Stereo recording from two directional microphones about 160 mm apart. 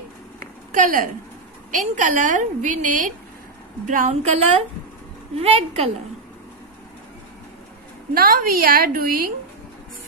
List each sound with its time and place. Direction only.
0.7 s a woman's voice: 55° right (ahead or behind)
5.3 s a woman's voice: 40° right (ahead or behind)
8.1 s a woman's voice: 65° right (ahead or behind)